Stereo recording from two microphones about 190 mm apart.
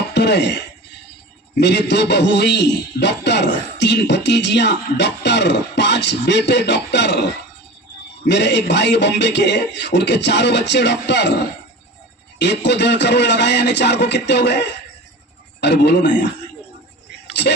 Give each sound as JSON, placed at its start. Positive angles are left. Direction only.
{"t": 0.1, "sound": "a sound", "side_deg": 65}
{"t": 1.5, "sound": "a man's voice", "side_deg": 65}
{"t": 8.3, "sound": "a man's voice", "side_deg": 65}
{"t": 12.4, "sound": "a man's voice", "side_deg": 65}
{"t": 17.4, "sound": "a man's voice", "side_deg": 65}